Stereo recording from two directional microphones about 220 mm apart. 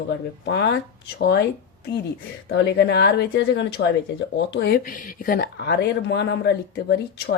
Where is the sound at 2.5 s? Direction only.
50° left (ahead or behind).